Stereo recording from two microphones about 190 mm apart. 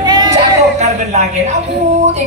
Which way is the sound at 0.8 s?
35° right (ahead or behind).